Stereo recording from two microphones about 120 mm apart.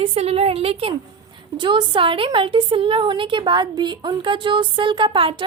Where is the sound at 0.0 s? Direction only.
55° right (ahead or behind).